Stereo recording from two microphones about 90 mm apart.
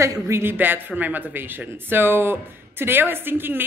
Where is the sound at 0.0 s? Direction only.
35° right (ahead or behind).